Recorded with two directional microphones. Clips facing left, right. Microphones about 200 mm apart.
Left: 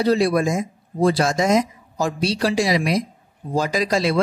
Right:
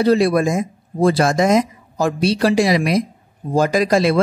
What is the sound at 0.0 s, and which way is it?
A woman's voice, 55° right (ahead or behind).